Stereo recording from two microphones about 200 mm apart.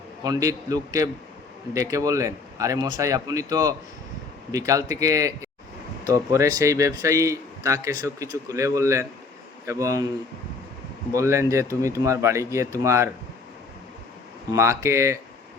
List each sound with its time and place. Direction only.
0.2 s speech: 20° right (ahead or behind)
11.1 s speech: 15° right (ahead or behind)
14.5 s speech: 15° right (ahead or behind)